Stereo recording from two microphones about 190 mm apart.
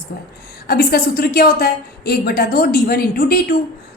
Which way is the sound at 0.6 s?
55° left (ahead or behind).